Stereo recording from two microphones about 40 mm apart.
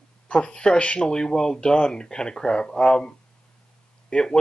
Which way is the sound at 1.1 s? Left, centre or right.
Centre.